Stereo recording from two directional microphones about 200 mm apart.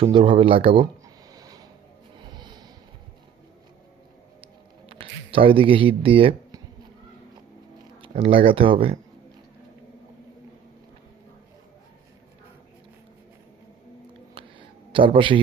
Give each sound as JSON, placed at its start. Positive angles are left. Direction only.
{"t": 0.0, "sound": "speech", "side_deg": -25}
{"t": 2.3, "sound": "music", "side_deg": -20}
{"t": 4.9, "sound": "speech", "side_deg": -30}
{"t": 8.0, "sound": "speech", "side_deg": -30}
{"t": 14.9, "sound": "speech", "side_deg": -25}